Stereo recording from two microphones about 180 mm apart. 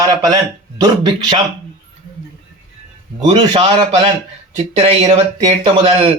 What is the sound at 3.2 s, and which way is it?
Speech, 40° right (ahead or behind).